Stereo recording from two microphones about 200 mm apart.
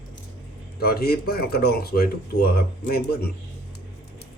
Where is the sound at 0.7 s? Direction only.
50° left (ahead or behind).